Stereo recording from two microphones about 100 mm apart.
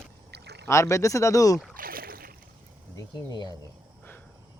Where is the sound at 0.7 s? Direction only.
30° left (ahead or behind).